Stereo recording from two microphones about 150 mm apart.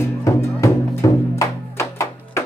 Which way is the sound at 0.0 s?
20° left (ahead or behind).